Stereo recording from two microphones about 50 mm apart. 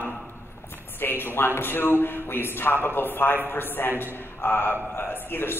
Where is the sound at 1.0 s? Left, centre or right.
Left.